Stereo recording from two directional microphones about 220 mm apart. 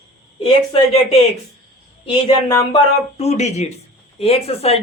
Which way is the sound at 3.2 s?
30° left (ahead or behind).